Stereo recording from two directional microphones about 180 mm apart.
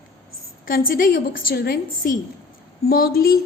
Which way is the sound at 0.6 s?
55° left (ahead or behind).